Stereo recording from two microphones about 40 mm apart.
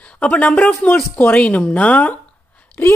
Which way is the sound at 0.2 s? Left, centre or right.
Left.